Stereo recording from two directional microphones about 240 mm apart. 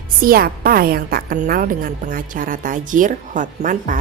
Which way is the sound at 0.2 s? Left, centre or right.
Right.